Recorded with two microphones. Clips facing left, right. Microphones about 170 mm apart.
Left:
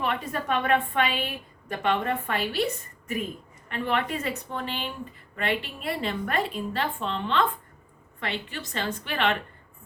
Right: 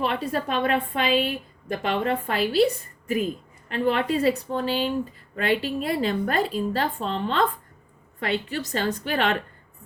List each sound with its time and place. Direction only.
0.0 s a woman's voice: 35° right (ahead or behind)
3.7 s a woman's voice: 35° right (ahead or behind)